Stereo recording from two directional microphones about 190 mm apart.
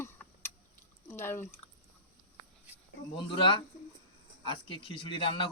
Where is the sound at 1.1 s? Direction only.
10° left (ahead or behind).